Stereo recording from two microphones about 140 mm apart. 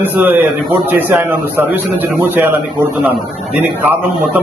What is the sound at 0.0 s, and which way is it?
A man's voice, 15° right (ahead or behind).